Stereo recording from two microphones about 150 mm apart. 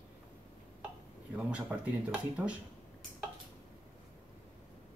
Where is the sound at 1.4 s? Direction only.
10° right (ahead or behind).